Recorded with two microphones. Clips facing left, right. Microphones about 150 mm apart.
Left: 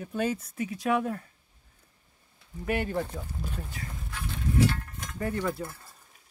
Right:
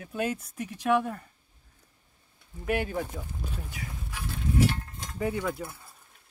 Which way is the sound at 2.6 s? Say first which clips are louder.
Even; centre (ahead or behind).